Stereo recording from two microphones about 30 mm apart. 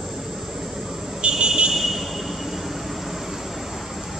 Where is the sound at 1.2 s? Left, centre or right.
Right.